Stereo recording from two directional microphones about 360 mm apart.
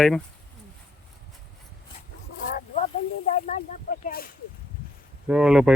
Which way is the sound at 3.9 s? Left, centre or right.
Left.